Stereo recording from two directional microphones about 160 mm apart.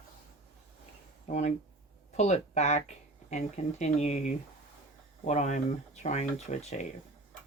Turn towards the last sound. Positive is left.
turn(degrees=45)  # may be behind; listen again after turning